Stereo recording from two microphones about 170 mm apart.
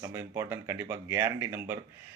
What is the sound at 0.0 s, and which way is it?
Speech, 20° right (ahead or behind).